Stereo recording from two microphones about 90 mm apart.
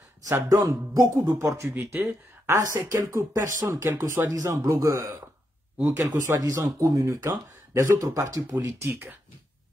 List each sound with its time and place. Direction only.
0.3 s speech: 25° right (ahead or behind)
0.6 s speech: 40° right (ahead or behind)
1.4 s speech: 30° right (ahead or behind)
8.6 s speech: 25° right (ahead or behind)